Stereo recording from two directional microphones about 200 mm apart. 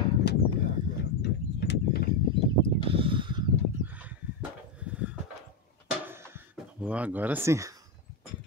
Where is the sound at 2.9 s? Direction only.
25° right (ahead or behind).